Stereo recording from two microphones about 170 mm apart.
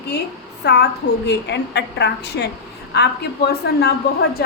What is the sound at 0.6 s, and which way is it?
Speech, 75° left (ahead or behind).